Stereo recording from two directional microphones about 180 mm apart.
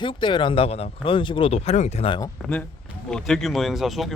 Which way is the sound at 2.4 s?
Centre (ahead or behind).